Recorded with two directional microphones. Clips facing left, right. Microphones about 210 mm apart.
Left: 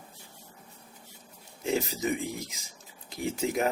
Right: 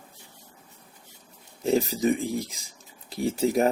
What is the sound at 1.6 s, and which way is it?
Speech, 35° right (ahead or behind).